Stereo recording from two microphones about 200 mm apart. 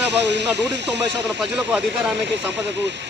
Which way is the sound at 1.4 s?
5° right (ahead or behind).